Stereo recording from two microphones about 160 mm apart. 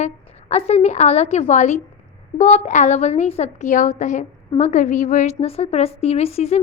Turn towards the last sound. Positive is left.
turn(degrees=40)  # may be behind; listen again after turning